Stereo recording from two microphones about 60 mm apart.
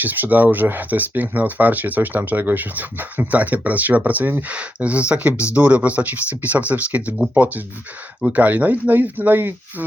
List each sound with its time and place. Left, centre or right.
0.0 s speech: right